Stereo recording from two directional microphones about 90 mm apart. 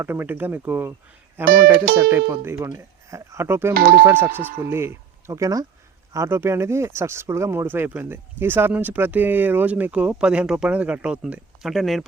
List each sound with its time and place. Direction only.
0.0 s speech: 25° right (ahead or behind); by 5.6 s 40° right (ahead or behind)
6.1 s speech: 25° right (ahead or behind); by 12.0 s centre (ahead or behind)